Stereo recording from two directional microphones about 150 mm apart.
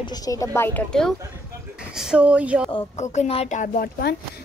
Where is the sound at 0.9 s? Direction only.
5° left (ahead or behind).